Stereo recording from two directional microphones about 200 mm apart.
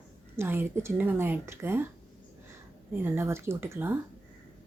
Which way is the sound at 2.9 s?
10° right (ahead or behind).